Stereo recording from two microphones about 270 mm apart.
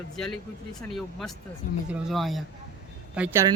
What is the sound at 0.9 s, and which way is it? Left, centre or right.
Speech, centre.